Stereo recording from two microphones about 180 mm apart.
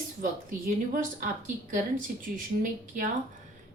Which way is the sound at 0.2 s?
50° right (ahead or behind).